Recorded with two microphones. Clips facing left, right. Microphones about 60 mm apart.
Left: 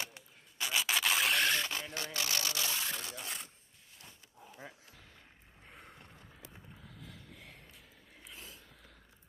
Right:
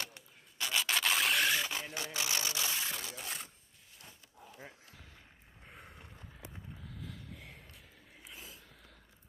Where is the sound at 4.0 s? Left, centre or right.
Centre.